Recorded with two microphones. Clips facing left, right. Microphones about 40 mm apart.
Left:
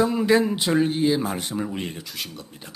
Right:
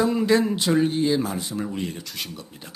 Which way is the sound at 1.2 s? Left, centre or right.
Left.